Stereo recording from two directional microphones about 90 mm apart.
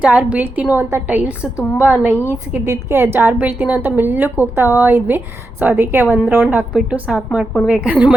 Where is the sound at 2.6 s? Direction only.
25° right (ahead or behind).